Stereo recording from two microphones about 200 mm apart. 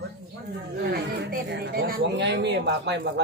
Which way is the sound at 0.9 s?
50° right (ahead or behind).